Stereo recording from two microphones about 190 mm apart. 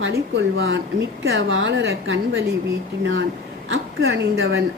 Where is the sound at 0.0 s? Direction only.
65° right (ahead or behind).